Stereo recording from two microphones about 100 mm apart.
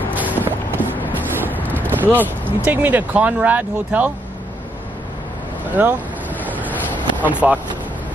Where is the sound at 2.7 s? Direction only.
15° right (ahead or behind).